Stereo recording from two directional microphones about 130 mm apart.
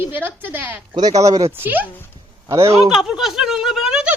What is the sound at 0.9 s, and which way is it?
A woman's voice, 30° right (ahead or behind).